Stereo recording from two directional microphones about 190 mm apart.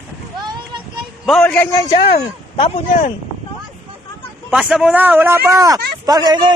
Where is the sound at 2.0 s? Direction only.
30° left (ahead or behind).